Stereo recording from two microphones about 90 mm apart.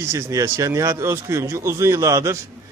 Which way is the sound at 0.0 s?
30° right (ahead or behind).